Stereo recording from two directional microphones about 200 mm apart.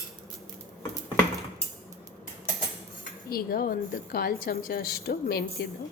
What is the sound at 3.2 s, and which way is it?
A woman's voice, 50° left (ahead or behind).